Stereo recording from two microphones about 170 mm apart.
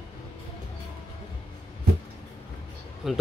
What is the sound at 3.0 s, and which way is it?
Speech, centre (ahead or behind).